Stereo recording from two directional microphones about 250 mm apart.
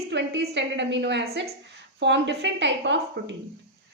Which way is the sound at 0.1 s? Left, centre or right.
Right.